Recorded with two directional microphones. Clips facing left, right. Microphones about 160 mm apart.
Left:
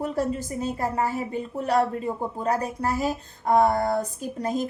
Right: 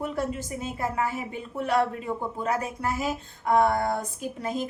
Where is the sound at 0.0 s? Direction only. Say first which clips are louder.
Left 3 dB; 35° left (ahead or behind).